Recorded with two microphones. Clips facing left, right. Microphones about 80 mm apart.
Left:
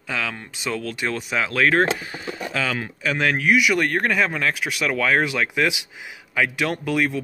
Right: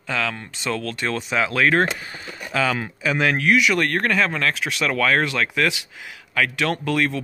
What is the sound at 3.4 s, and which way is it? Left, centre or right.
Speech, centre.